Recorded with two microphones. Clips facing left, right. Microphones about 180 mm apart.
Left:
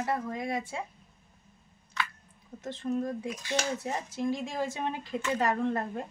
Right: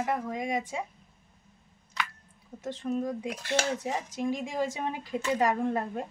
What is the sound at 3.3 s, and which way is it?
Speech, 65° right (ahead or behind).